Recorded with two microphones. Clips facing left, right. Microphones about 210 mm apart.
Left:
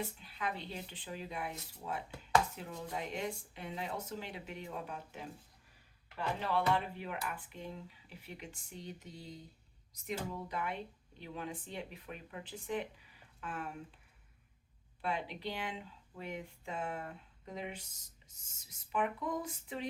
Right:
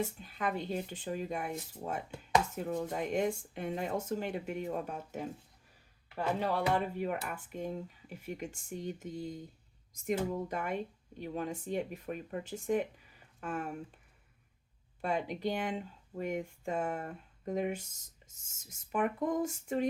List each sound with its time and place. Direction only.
0.0 s speech: 45° right (ahead or behind)
15.0 s speech: 45° right (ahead or behind)